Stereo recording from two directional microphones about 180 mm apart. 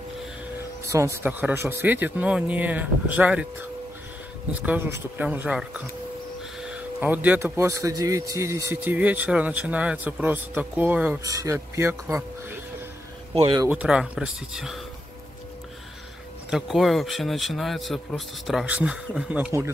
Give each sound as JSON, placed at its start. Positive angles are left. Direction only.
{"t": 0.8, "sound": "speech", "side_deg": -15}
{"t": 4.6, "sound": "speech", "side_deg": -10}
{"t": 13.3, "sound": "speech", "side_deg": -30}
{"t": 13.7, "sound": "speech", "side_deg": -5}
{"t": 16.4, "sound": "speech", "side_deg": 0}